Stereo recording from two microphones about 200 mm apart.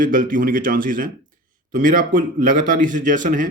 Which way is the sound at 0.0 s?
45° right (ahead or behind).